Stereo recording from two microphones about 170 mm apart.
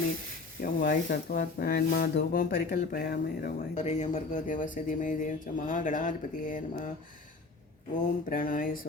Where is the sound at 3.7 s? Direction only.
40° left (ahead or behind).